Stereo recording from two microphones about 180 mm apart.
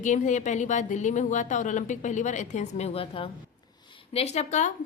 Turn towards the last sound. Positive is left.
turn(degrees=40)  # may be behind; listen again after turning